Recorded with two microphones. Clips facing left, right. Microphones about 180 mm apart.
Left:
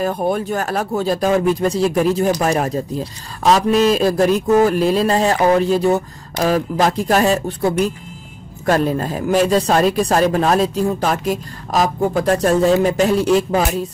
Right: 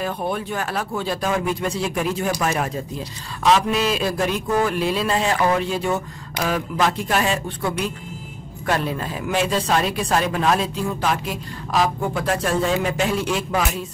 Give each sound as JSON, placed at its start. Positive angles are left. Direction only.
{"t": 0.0, "sound": "speech", "side_deg": 40}